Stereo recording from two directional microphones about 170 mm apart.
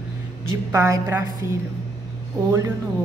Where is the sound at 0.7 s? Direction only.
15° right (ahead or behind).